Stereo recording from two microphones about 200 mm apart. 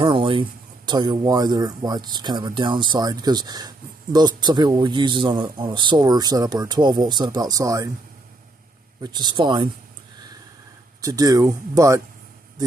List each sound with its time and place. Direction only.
0.0 s speech: 25° right (ahead or behind)
9.0 s speech: 20° right (ahead or behind)
11.0 s speech: 15° right (ahead or behind)